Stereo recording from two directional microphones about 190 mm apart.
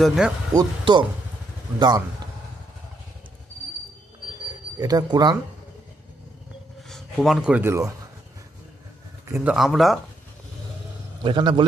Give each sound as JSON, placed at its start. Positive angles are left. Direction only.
{"t": 0.0, "sound": "speech", "side_deg": -5}
{"t": 0.5, "sound": "speech", "side_deg": -25}
{"t": 4.8, "sound": "speech", "side_deg": -20}
{"t": 6.8, "sound": "speech", "side_deg": 0}
{"t": 9.3, "sound": "speech", "side_deg": -5}
{"t": 11.2, "sound": "speech", "side_deg": -25}